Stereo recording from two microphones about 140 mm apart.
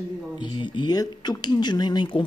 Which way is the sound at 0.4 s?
35° left (ahead or behind).